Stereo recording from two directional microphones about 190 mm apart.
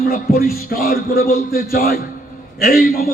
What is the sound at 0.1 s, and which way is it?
Speech, 50° left (ahead or behind).